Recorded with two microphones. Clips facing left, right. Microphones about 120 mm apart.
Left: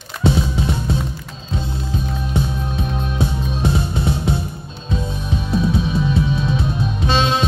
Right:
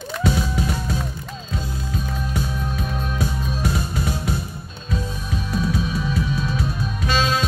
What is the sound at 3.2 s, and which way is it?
Music, 25° left (ahead or behind).